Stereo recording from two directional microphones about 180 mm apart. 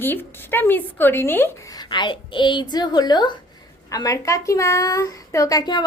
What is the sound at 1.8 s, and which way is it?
Speech, 25° left (ahead or behind).